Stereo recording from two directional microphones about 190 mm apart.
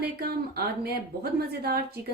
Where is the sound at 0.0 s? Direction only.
55° right (ahead or behind).